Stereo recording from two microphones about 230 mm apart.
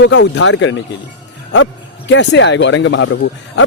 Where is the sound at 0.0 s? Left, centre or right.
Left.